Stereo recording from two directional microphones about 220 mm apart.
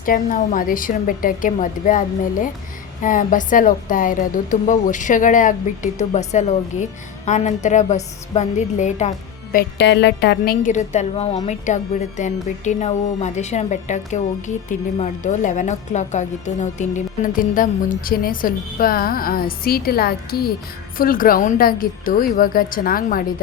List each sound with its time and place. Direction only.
0.0 s a woman's voice: 40° left (ahead or behind)